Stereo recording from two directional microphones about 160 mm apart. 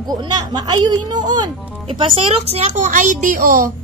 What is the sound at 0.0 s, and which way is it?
A woman's voice, 25° right (ahead or behind).